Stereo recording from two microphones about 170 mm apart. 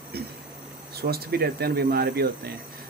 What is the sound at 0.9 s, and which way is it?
Speech, 65° right (ahead or behind).